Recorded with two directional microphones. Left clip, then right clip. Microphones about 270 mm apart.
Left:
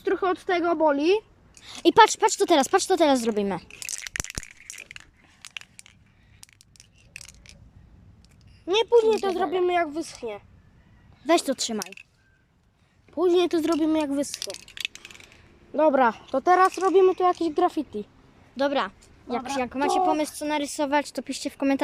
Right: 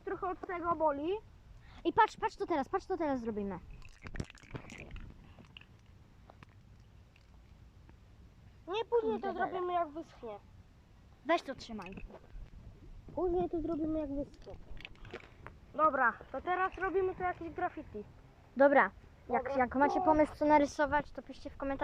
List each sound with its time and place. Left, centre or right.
0.0 s a woman's voice: left
8.6 s a woman's voice: centre
11.3 s speech: centre
13.4 s speech: left
15.7 s speech: left
18.5 s speech: centre